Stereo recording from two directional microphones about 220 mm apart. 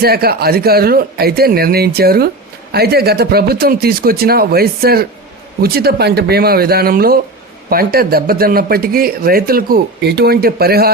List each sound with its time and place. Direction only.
0.0 s a man's voice: 45° right (ahead or behind)